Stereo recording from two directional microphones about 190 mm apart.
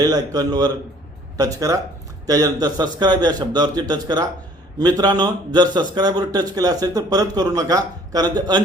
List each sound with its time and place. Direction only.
0.0 s a man's voice: 20° right (ahead or behind)